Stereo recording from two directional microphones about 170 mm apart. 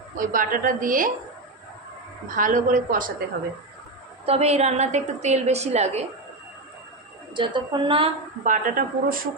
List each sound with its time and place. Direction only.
0.2 s a woman's voice: 55° right (ahead or behind)
2.3 s a woman's voice: 50° right (ahead or behind)
4.3 s a woman's voice: 40° right (ahead or behind)
7.3 s a woman's voice: 30° right (ahead or behind)
8.5 s speech: 55° right (ahead or behind)